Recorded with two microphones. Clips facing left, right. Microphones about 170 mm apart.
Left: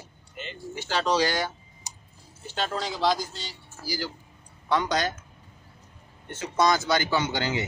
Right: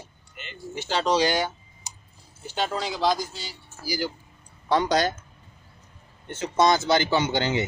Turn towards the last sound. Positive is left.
turn(degrees=-25)  # may be behind; listen again after turning